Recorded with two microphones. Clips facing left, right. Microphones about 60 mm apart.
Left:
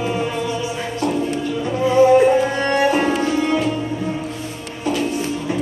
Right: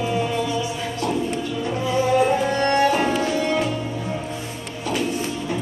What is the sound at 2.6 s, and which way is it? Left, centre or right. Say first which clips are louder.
Music: left 2 dB; centre.